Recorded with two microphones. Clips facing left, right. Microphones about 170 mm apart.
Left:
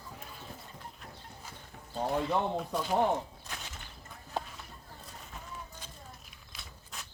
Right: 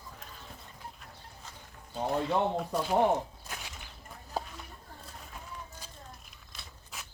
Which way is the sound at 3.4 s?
10° right (ahead or behind).